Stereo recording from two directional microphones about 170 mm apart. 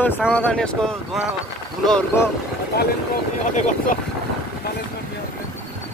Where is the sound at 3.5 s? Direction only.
45° left (ahead or behind).